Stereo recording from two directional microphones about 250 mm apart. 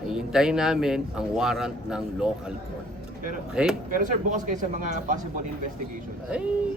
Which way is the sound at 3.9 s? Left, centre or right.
Right.